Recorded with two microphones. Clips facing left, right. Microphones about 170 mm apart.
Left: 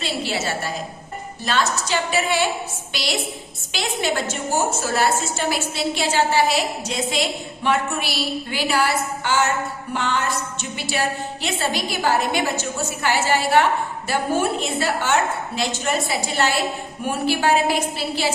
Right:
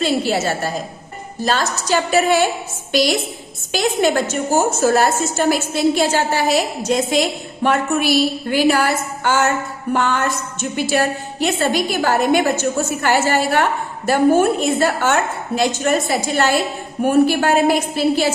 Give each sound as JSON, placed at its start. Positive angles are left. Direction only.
{"t": 0.0, "sound": "a woman's voice", "side_deg": -45}